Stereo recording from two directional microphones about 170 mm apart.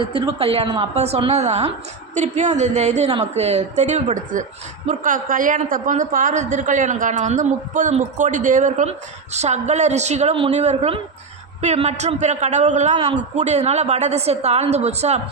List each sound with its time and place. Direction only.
0.0 s a woman's voice: 30° right (ahead or behind)